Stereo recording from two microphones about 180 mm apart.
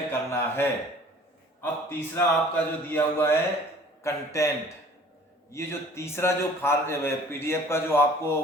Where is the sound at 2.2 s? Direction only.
10° left (ahead or behind).